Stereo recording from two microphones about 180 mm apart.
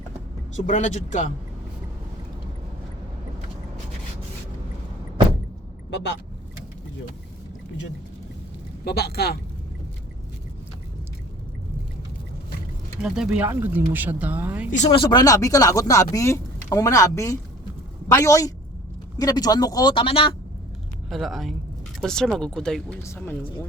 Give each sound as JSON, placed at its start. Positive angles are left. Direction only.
{"t": 0.5, "sound": "a man's voice", "side_deg": 40}
{"t": 5.9, "sound": "speech", "side_deg": 70}
{"t": 8.8, "sound": "a man's voice", "side_deg": 60}
{"t": 13.0, "sound": "speech", "side_deg": -5}
{"t": 14.9, "sound": "speech", "side_deg": 25}
{"t": 21.1, "sound": "speech", "side_deg": 0}